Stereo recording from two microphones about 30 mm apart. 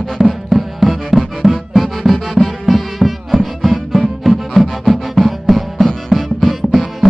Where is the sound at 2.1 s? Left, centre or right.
Centre.